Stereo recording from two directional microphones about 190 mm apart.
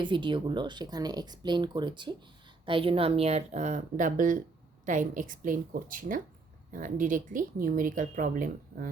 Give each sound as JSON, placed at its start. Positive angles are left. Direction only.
{"t": 0.0, "sound": "a woman's voice", "side_deg": -25}